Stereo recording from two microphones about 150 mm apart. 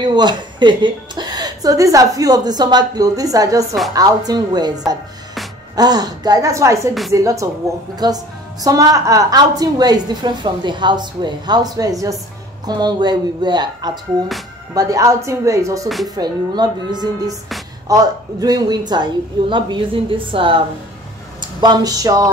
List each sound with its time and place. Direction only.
0.0 s a woman's voice: 30° right (ahead or behind)